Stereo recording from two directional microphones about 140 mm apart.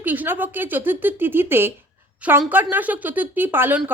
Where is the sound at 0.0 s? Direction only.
15° right (ahead or behind).